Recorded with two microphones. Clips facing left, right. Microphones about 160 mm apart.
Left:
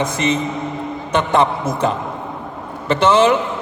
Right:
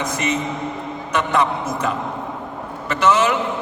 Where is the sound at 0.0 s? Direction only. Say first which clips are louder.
Left 4 dB; 30° left (ahead or behind).